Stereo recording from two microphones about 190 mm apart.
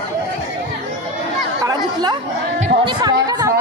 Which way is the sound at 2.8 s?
20° right (ahead or behind).